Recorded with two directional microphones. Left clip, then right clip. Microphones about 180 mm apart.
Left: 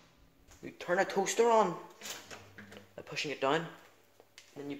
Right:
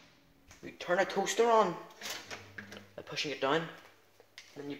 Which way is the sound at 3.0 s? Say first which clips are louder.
Even; 15° left (ahead or behind).